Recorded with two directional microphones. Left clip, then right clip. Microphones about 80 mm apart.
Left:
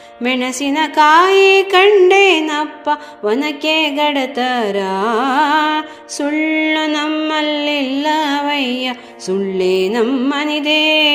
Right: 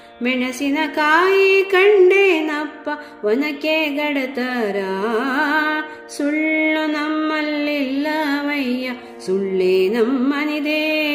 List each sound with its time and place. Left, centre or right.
0.2 s music: left
10.1 s music: left